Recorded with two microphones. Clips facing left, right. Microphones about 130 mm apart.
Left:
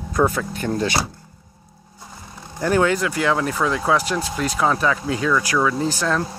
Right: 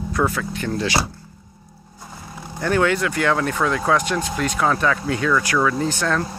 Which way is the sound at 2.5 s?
20° left (ahead or behind).